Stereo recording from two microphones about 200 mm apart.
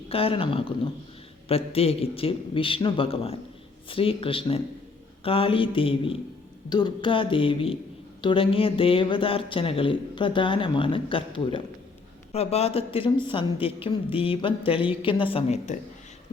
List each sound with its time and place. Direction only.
0.1 s a woman's voice: 30° left (ahead or behind)